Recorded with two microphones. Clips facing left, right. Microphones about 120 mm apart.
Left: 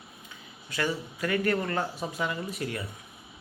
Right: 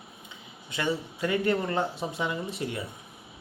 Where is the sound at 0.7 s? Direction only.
25° right (ahead or behind).